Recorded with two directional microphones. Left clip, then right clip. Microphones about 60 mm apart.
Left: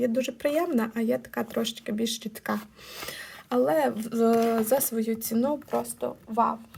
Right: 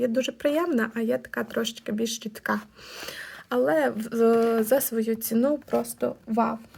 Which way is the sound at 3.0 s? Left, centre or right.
Centre.